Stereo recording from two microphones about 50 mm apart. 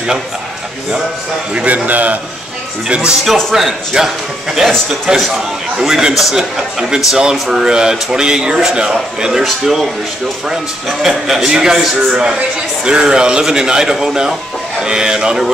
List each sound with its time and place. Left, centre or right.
1.5 s a man's voice: right
1.9 s a man's voice: right
2.9 s a man's voice: centre
3.3 s a man's voice: centre
3.5 s a man's voice: centre
4.6 s a man's voice: centre
9.4 s a man's voice: centre